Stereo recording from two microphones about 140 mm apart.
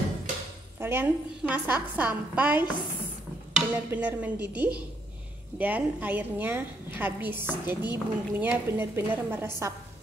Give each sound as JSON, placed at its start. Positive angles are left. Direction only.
{"t": 0.7, "sound": "a woman's voice", "side_deg": -15}